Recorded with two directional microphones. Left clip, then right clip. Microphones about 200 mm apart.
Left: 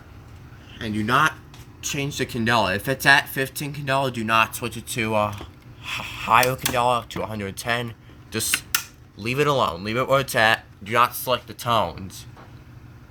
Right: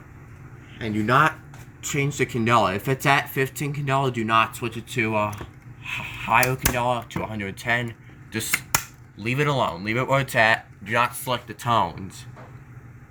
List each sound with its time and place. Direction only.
0.9 s speech: 15° left (ahead or behind)
9.1 s speech: 20° left (ahead or behind)